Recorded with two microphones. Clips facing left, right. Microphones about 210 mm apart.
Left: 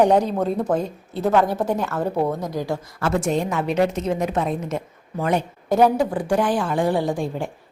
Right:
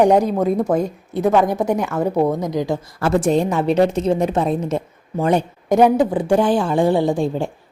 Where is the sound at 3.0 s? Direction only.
35° right (ahead or behind).